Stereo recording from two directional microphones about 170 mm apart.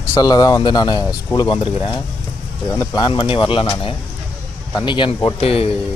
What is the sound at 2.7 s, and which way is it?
Speech, 20° left (ahead or behind).